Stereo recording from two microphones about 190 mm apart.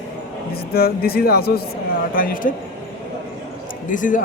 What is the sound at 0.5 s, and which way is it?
Speech, 55° left (ahead or behind).